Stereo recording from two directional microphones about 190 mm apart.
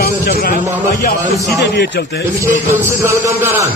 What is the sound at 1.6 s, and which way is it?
Speech, 65° left (ahead or behind).